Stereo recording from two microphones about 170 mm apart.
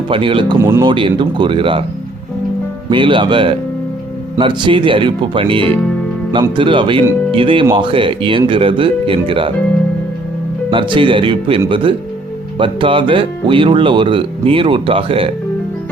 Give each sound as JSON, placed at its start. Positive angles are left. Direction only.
{"t": 0.1, "sound": "speech", "side_deg": -30}
{"t": 0.6, "sound": "speech", "side_deg": -15}
{"t": 0.9, "sound": "speech", "side_deg": -30}
{"t": 2.9, "sound": "speech", "side_deg": -30}
{"t": 10.7, "sound": "speech", "side_deg": -30}